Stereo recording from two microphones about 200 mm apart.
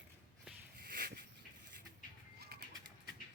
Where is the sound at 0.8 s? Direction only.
50° right (ahead or behind).